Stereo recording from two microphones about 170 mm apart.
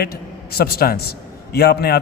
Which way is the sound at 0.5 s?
65° left (ahead or behind).